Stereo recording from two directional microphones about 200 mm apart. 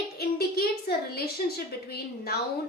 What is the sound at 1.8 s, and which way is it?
Speech, 50° left (ahead or behind).